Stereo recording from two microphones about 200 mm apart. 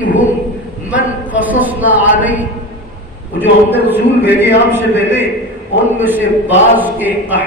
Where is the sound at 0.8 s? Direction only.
5° right (ahead or behind).